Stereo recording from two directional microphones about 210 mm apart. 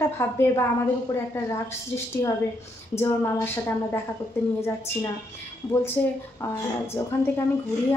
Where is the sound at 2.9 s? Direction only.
10° left (ahead or behind).